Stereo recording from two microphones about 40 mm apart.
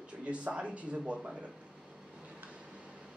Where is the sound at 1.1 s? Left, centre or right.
Centre.